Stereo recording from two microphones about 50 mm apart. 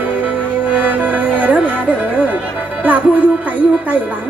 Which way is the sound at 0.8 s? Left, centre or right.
Right.